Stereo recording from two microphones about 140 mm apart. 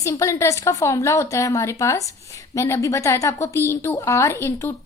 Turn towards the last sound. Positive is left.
turn(degrees=15)  # may be behind; listen again after turning